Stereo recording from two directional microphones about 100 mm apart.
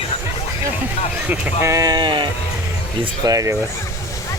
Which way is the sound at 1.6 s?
30° right (ahead or behind).